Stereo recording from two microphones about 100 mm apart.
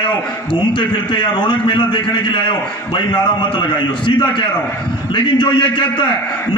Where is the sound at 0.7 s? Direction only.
60° left (ahead or behind).